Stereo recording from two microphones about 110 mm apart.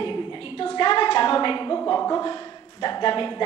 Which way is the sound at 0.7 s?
40° left (ahead or behind).